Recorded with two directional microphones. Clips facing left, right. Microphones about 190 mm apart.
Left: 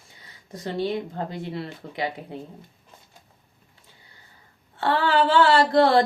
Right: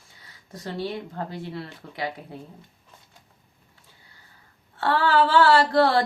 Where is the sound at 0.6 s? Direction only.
20° left (ahead or behind).